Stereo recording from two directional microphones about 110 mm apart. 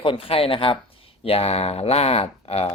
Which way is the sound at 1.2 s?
70° left (ahead or behind).